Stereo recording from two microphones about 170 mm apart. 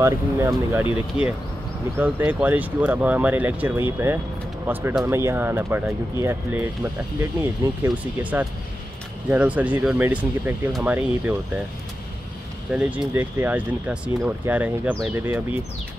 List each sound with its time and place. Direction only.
0.0 s speech: 15° right (ahead or behind)
12.7 s speech: 10° right (ahead or behind)